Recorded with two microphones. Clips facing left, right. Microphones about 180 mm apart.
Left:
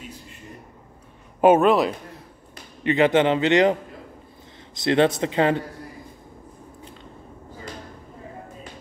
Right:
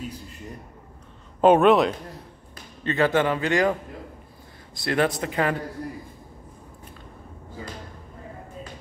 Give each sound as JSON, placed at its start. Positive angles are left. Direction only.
{"t": 1.4, "sound": "a man's voice", "side_deg": 5}
{"t": 2.8, "sound": "a man's voice", "side_deg": 15}
{"t": 4.7, "sound": "a man's voice", "side_deg": 25}